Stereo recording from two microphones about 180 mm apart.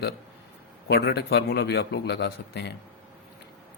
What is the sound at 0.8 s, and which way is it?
A man's voice, 60° left (ahead or behind).